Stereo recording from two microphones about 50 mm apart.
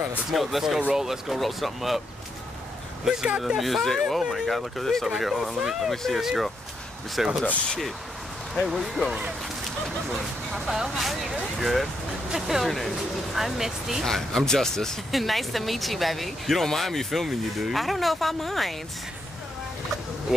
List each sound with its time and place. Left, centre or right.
0.3 s speech: centre
0.7 s speech: centre
1.0 s speech: centre
3.5 s speech: centre
5.2 s speech: centre
5.9 s speech: centre
8.6 s speech: centre
10.6 s speech: centre
12.6 s speech: centre
14.0 s speech: centre
20.3 s speech: centre